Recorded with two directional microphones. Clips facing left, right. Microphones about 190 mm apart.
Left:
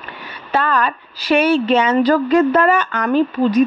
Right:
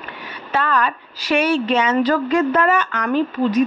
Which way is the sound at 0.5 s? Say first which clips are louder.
Left 2 dB; 35° left (ahead or behind).